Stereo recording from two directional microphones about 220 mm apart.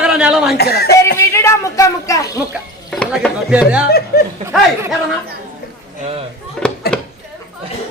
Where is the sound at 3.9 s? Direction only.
45° left (ahead or behind).